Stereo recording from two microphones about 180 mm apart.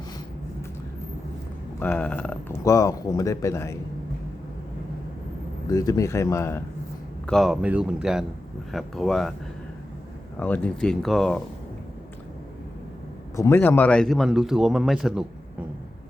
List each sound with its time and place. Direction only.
1.8 s speech: 10° left (ahead or behind)
5.6 s speech: 20° left (ahead or behind)
7.3 s a man's voice: centre (ahead or behind)
10.4 s a man's voice: 10° left (ahead or behind)
13.3 s a man's voice: 15° left (ahead or behind); by 15.3 s 5° right (ahead or behind)